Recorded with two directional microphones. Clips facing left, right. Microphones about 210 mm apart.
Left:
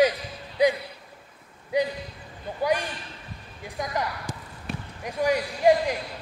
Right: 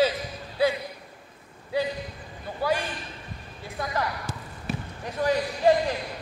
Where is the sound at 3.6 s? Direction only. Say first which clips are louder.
Even; 15° left (ahead or behind).